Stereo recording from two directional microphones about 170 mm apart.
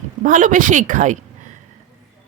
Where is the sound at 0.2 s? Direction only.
50° right (ahead or behind).